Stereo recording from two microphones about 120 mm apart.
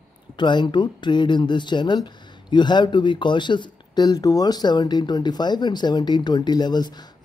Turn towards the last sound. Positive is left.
turn(degrees=35)  # may be behind; listen again after turning